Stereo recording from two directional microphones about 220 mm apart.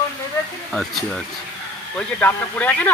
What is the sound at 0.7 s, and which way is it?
Speech, centre (ahead or behind).